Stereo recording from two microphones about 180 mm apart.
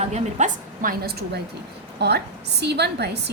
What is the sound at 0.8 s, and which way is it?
A woman's voice, 55° right (ahead or behind).